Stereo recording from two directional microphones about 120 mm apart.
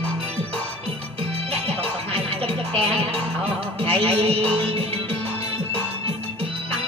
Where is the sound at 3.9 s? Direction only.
55° right (ahead or behind).